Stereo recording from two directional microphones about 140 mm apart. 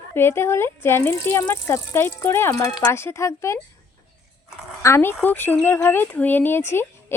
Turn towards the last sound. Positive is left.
turn(degrees=15)  # may be behind; listen again after turning